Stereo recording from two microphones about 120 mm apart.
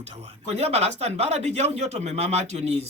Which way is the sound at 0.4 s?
60° right (ahead or behind).